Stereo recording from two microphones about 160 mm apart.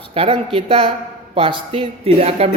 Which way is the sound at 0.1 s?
35° right (ahead or behind).